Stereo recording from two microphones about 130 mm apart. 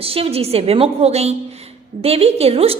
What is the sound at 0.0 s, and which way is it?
A woman's voice, 45° right (ahead or behind).